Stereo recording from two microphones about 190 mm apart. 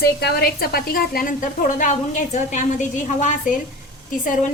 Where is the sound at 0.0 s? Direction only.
60° left (ahead or behind); by 2.6 s 40° left (ahead or behind).